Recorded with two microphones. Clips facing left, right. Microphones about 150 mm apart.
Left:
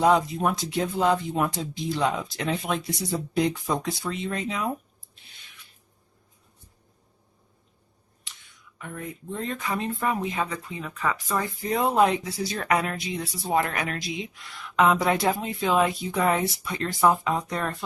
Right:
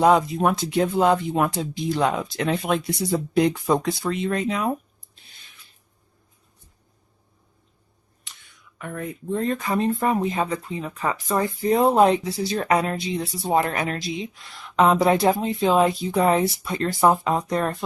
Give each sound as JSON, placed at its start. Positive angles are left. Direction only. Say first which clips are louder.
{"t": 0.0, "sound": "speech", "louder": "right 3 dB", "side_deg": -65}
{"t": 8.8, "sound": "speech", "louder": "right 5 dB", "side_deg": -60}
{"t": 9.5, "sound": "speech", "louder": "right 6 dB", "side_deg": -40}
{"t": 13.6, "sound": "speech", "louder": "right 2 dB", "side_deg": -40}